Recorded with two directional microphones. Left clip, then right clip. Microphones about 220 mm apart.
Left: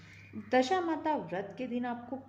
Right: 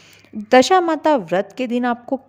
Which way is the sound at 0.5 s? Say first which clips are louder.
Right 16 dB; 50° right (ahead or behind).